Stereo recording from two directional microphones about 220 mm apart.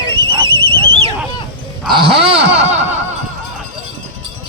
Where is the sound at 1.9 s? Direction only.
25° right (ahead or behind).